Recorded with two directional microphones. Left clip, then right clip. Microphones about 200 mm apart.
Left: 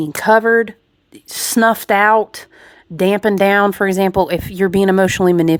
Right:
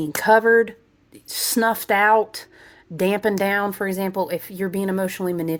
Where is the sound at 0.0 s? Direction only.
25° left (ahead or behind).